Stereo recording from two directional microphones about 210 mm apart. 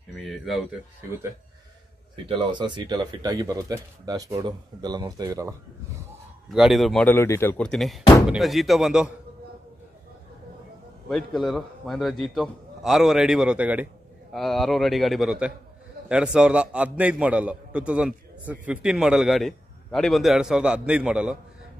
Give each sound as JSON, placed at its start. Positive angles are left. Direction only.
{"t": 0.1, "sound": "speech", "side_deg": 0}
{"t": 2.2, "sound": "speech", "side_deg": -20}
{"t": 6.5, "sound": "a man's voice", "side_deg": 0}
{"t": 11.1, "sound": "a man's voice", "side_deg": 0}